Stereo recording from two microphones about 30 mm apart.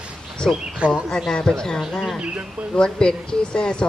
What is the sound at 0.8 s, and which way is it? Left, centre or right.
Speech, right.